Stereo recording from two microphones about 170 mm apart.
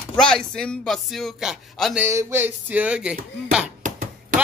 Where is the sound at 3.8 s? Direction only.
45° right (ahead or behind).